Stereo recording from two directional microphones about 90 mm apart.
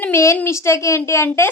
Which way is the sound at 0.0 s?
30° left (ahead or behind).